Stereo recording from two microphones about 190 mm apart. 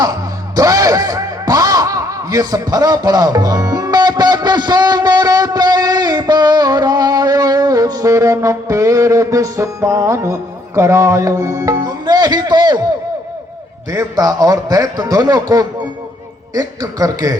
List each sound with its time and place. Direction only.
0.0 s speech: 20° right (ahead or behind)
13.9 s a man's voice: 20° right (ahead or behind)